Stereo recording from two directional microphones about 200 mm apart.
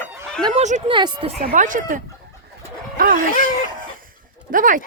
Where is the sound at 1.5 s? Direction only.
40° right (ahead or behind).